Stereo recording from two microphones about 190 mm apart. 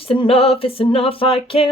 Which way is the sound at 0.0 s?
30° left (ahead or behind).